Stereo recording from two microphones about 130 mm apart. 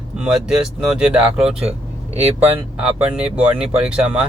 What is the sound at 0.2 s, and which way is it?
Speech, 5° right (ahead or behind).